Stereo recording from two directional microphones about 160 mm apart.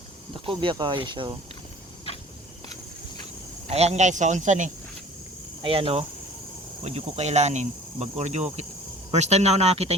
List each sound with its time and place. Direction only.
0.4 s speech: 30° right (ahead or behind)
3.7 s speech: 40° right (ahead or behind)
5.6 s speech: 35° right (ahead or behind)